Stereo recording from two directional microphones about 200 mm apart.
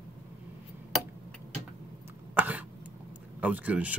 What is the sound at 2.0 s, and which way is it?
Throat clearing, 10° right (ahead or behind).